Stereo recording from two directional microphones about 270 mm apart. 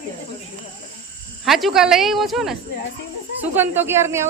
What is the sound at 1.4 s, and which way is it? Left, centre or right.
Speech, centre.